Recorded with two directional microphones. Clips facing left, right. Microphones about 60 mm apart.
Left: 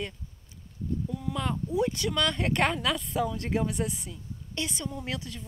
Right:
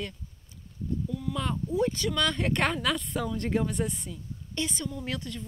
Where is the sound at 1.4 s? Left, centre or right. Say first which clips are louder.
Even; centre.